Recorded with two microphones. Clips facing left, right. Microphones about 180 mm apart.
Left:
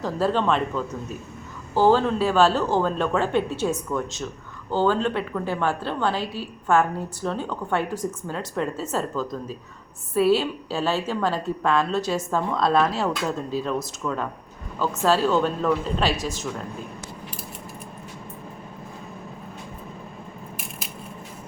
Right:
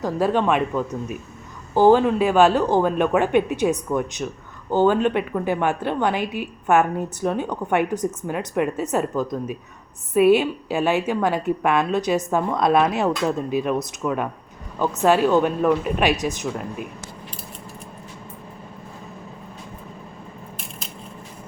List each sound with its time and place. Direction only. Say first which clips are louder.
0.0 s a woman's voice: right 2 dB; 15° right (ahead or behind)